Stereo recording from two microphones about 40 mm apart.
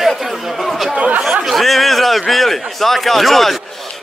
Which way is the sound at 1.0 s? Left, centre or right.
Right.